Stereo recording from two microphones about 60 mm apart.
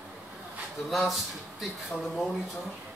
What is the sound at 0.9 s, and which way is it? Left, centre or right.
Speech, centre.